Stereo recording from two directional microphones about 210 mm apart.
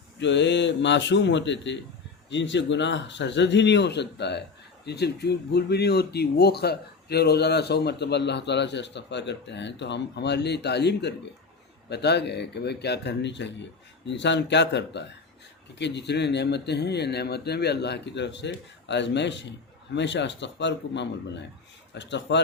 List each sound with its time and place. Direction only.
0.2 s speech: 55° left (ahead or behind)